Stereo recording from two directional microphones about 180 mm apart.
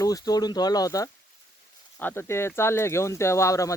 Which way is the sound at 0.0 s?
20° left (ahead or behind).